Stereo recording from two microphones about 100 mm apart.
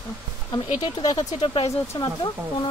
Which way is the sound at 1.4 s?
65° left (ahead or behind).